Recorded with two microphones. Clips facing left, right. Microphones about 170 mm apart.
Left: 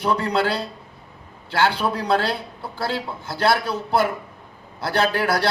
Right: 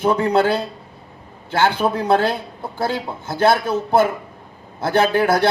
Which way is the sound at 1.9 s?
45° right (ahead or behind).